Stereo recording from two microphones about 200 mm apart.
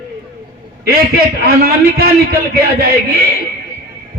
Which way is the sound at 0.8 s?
50° right (ahead or behind).